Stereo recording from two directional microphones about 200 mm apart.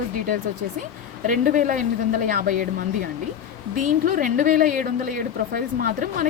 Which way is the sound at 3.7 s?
40° right (ahead or behind).